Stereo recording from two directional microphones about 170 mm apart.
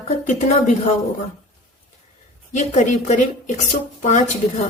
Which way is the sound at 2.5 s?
45° left (ahead or behind).